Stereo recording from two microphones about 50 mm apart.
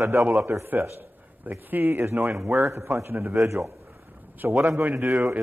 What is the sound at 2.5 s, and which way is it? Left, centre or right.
Speech, right.